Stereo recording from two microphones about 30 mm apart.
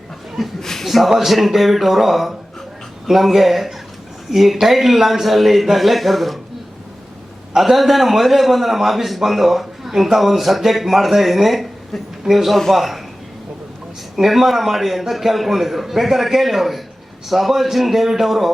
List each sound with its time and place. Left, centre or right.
0.6 s speech: centre
0.9 s a man's voice: centre
7.5 s a man's voice: centre
14.2 s a man's voice: centre